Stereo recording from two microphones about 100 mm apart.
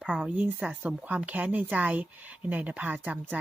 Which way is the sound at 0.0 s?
10° right (ahead or behind).